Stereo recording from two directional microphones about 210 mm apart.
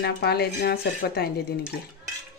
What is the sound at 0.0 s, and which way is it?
Speech, 50° left (ahead or behind).